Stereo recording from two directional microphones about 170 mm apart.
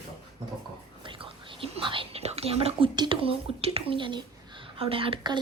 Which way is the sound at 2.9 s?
30° right (ahead or behind).